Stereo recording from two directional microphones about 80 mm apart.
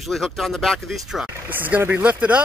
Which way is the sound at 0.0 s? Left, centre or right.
Centre.